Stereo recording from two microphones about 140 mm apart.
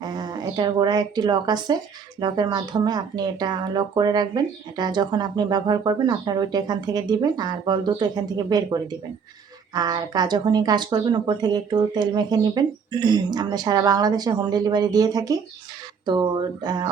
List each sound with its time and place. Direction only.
0.0 s a woman's voice: 30° right (ahead or behind)